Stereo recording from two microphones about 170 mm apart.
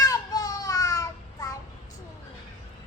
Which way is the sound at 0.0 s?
20° left (ahead or behind).